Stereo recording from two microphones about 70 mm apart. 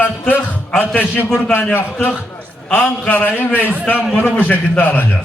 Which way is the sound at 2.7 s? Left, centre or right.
Centre.